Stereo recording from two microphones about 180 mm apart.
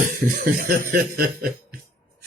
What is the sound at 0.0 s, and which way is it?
Snicker, 50° right (ahead or behind).